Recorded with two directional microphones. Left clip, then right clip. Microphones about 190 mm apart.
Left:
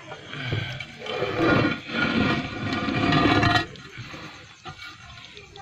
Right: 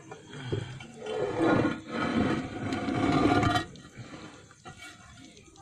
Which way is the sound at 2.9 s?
25° right (ahead or behind).